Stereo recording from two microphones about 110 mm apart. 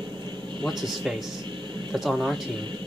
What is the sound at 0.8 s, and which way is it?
Speech, centre (ahead or behind).